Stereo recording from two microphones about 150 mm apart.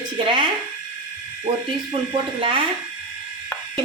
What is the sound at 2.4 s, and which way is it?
Speech, 35° right (ahead or behind).